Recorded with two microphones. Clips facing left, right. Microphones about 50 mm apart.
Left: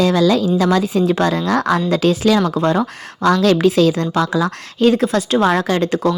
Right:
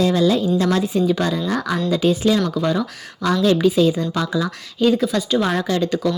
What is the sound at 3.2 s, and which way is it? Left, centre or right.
Speech, left.